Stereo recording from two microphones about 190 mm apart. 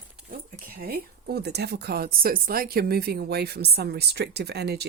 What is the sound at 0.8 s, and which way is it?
A woman's voice, 55° right (ahead or behind).